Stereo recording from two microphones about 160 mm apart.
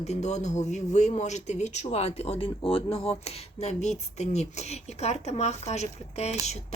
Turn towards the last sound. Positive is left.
turn(degrees=45)  # may be behind; listen again after turning